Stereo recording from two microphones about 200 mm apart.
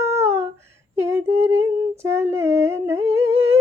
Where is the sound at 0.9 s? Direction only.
10° right (ahead or behind).